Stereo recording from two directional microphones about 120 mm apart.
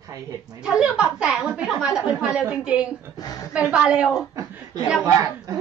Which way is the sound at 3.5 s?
10° right (ahead or behind).